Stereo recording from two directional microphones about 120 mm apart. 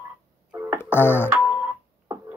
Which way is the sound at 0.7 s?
20° left (ahead or behind).